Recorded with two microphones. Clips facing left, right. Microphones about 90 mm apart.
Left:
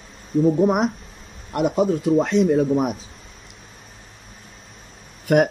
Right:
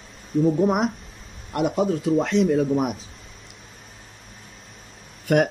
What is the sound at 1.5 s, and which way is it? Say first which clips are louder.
Speech: left 2 dB; 25° left (ahead or behind).